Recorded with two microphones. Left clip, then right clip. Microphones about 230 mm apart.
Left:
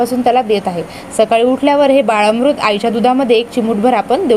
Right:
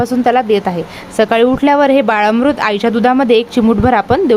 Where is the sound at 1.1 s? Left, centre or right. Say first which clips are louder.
Even; right.